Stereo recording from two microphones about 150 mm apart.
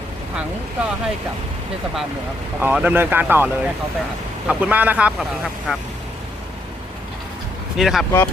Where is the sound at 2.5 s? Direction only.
10° right (ahead or behind).